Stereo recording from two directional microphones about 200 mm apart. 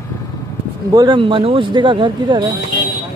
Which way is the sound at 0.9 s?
20° right (ahead or behind).